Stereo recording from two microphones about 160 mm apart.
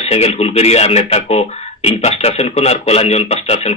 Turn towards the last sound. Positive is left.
turn(degrees=40)  # may be behind; listen again after turning